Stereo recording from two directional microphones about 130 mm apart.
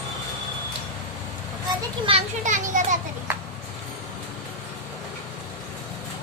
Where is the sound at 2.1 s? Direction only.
45° right (ahead or behind).